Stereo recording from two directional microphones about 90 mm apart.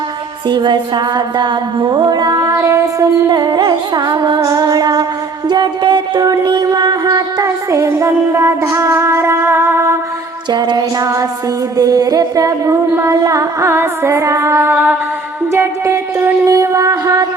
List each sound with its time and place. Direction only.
0.4 s music: 60° right (ahead or behind); by 2.6 s 45° right (ahead or behind)
2.6 s music: 35° right (ahead or behind)
3.2 s music: 50° right (ahead or behind)
5.5 s music: 55° right (ahead or behind); by 10.0 s 30° right (ahead or behind)
10.5 s music: 55° right (ahead or behind)
11.0 s music: 35° right (ahead or behind)
15.5 s a sound: 30° right (ahead or behind)